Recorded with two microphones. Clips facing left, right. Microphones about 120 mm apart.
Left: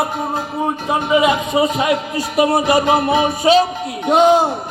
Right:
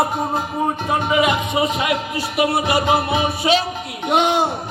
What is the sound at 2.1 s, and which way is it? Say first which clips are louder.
Speech: left 4 dB; 40° left (ahead or behind).